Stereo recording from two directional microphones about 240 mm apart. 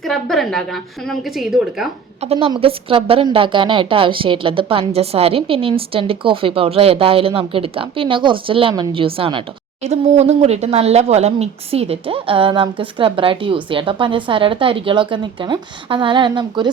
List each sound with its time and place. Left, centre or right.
0.0 s a woman's voice: centre
2.2 s a woman's voice: right